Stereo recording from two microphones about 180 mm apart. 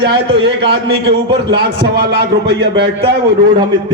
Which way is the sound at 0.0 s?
65° right (ahead or behind).